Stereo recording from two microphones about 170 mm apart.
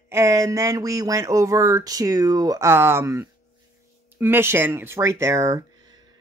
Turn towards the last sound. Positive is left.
turn(degrees=-20)  # may be behind; listen again after turning